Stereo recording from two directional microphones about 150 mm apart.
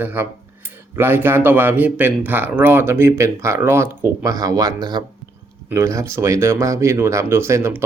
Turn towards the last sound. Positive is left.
turn(degrees=-20)  # may be behind; listen again after turning